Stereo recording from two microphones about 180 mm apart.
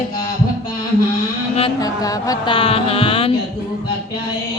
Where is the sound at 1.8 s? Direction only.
25° left (ahead or behind).